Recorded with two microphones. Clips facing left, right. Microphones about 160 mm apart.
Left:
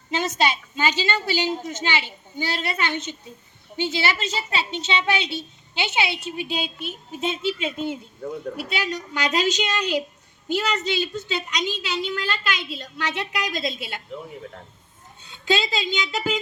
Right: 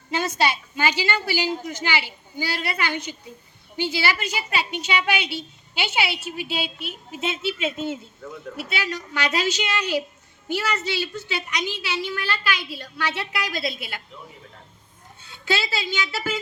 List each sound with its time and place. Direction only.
0.1 s a woman's voice: 20° left (ahead or behind)
8.2 s speech: 40° left (ahead or behind)
8.5 s a woman's voice: 15° left (ahead or behind)
15.2 s a woman's voice: 20° left (ahead or behind)